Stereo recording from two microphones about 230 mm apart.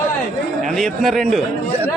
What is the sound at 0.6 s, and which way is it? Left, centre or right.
Speech, centre.